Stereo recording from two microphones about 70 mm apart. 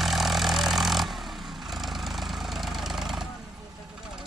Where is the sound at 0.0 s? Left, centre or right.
Centre.